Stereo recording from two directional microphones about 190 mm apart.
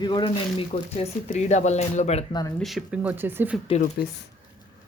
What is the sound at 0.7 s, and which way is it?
Speech, 35° left (ahead or behind).